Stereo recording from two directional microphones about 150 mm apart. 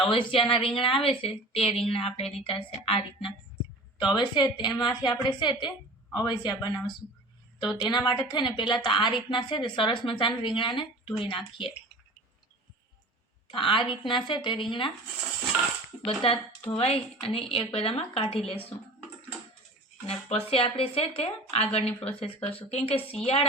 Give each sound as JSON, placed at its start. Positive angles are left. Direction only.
{"t": 0.0, "sound": "a woman's voice", "side_deg": 35}
{"t": 13.5, "sound": "a woman's voice", "side_deg": 35}
{"t": 15.5, "sound": "speech", "side_deg": -5}
{"t": 16.2, "sound": "a woman's voice", "side_deg": 40}
{"t": 20.3, "sound": "a woman's voice", "side_deg": 40}